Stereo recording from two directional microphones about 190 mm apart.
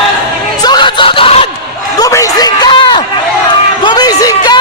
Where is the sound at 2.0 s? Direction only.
15° left (ahead or behind).